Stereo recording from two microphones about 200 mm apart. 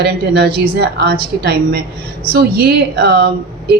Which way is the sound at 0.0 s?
50° right (ahead or behind).